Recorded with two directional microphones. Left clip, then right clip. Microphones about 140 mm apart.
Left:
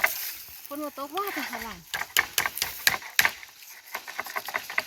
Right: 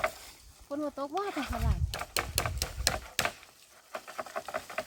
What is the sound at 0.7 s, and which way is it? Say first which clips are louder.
Sizzle: even; 75° right (ahead or behind).